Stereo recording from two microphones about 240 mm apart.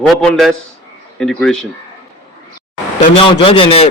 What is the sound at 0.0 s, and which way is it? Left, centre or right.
A man's voice, centre.